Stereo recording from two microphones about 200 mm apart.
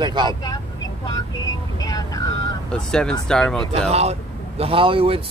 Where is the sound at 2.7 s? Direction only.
5° left (ahead or behind).